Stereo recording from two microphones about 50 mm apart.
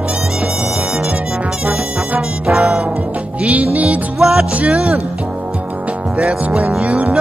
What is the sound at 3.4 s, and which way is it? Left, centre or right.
Music, right.